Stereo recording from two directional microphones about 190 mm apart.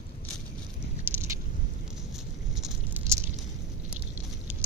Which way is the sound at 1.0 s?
15° right (ahead or behind).